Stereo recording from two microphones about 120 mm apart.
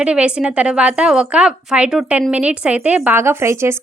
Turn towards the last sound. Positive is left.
turn(degrees=-25)  # may be behind; listen again after turning